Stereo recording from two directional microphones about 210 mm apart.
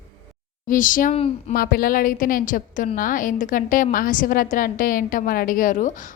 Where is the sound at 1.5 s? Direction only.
45° left (ahead or behind).